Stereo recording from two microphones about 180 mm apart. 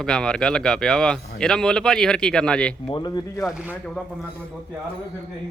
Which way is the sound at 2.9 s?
20° left (ahead or behind).